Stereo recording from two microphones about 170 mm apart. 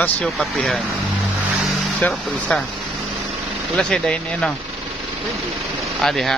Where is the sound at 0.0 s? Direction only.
5° left (ahead or behind).